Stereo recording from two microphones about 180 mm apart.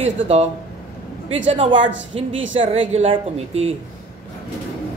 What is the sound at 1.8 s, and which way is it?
Speech, 90° right.